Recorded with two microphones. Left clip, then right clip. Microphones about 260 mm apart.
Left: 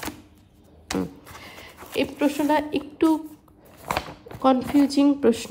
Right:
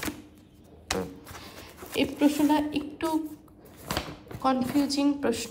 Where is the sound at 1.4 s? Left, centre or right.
Left.